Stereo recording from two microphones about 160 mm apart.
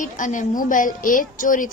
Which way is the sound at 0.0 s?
55° left (ahead or behind).